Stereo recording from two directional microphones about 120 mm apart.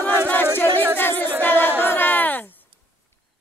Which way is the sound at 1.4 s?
15° left (ahead or behind).